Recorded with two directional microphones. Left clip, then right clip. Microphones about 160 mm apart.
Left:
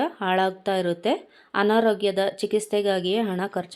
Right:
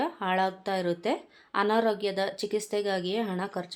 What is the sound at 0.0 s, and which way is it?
Speech, 25° left (ahead or behind).